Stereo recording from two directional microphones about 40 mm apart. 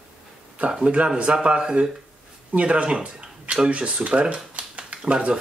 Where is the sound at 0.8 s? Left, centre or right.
Right.